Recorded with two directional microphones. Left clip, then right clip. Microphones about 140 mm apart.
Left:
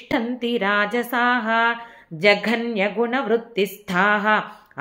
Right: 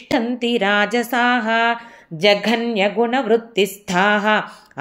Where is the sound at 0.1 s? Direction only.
30° right (ahead or behind).